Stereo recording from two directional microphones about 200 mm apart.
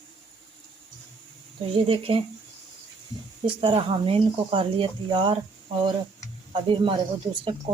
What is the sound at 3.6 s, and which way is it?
Speech, 25° right (ahead or behind).